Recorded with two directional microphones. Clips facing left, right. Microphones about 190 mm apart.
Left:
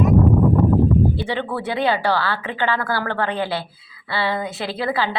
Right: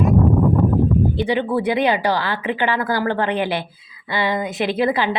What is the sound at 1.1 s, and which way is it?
A woman's voice, 15° right (ahead or behind).